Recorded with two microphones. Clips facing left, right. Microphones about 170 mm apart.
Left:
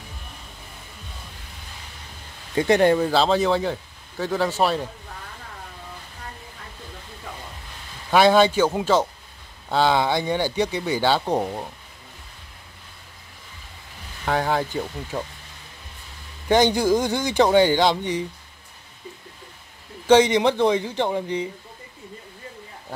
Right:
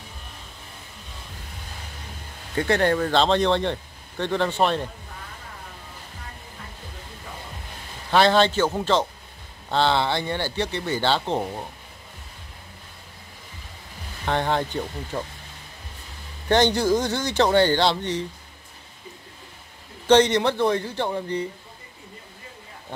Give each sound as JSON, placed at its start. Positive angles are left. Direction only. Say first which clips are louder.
{"t": 2.5, "sound": "a man's voice", "louder": "left 4 dB", "side_deg": 15}
{"t": 8.1, "sound": "speech", "louder": "left 2 dB", "side_deg": 10}
{"t": 14.2, "sound": "a man's voice", "louder": "left 1 dB", "side_deg": 5}
{"t": 16.4, "sound": "speech", "louder": "left 1 dB", "side_deg": 10}
{"t": 20.1, "sound": "speech", "louder": "left 2 dB", "side_deg": 10}